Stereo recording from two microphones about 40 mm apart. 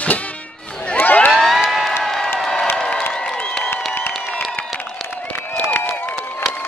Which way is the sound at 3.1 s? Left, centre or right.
Left.